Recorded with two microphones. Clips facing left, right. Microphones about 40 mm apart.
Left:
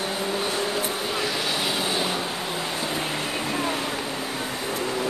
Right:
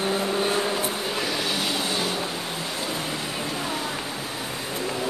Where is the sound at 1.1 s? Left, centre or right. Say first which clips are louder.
Left 1 dB; centre.